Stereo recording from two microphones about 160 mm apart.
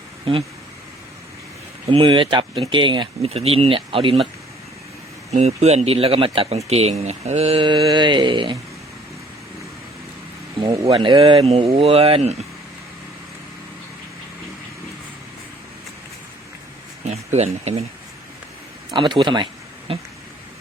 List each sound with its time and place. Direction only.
0.3 s speech: 35° right (ahead or behind)
1.9 s speech: 35° right (ahead or behind)
5.3 s speech: 45° right (ahead or behind)
10.8 s speech: 30° right (ahead or behind)
17.1 s speech: 40° right (ahead or behind)
18.9 s speech: 30° right (ahead or behind)